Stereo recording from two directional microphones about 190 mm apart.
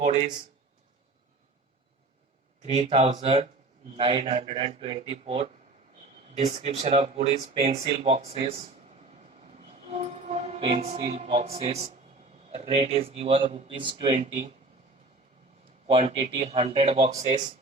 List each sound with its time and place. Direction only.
2.7 s speech: 30° right (ahead or behind)
9.6 s speech: 35° right (ahead or behind)
15.9 s speech: 30° right (ahead or behind)